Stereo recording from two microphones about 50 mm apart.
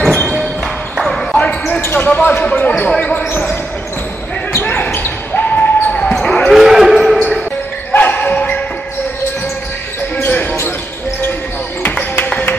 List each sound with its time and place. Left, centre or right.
0.0 s a sound: centre
0.9 s basketball bounce: centre
1.4 s basketball bounce: left
1.8 s basketball bounce: left
2.0 s basketball bounce: left
4.9 s basketball bounce: left
6.1 s basketball bounce: centre
6.5 s a sound: centre
7.9 s dog: left
10.2 s basketball bounce: left
11.8 s music: left